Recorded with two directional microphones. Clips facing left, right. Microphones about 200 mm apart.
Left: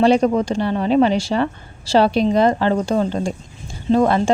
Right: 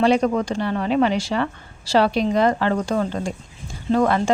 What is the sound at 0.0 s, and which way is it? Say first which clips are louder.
Speech: left 3 dB; 30° left (ahead or behind).